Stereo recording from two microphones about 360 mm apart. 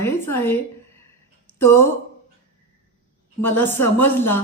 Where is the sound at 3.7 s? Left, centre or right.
Left.